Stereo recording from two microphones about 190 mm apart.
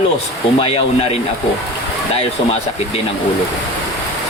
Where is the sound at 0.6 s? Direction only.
30° left (ahead or behind).